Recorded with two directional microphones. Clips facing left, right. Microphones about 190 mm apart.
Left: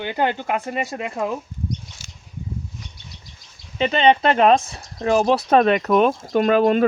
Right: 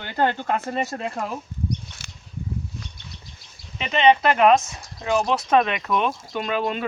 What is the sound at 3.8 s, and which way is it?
Speech, 35° left (ahead or behind).